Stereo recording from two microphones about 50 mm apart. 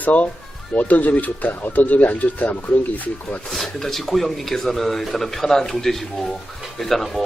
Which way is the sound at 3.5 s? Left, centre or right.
Centre.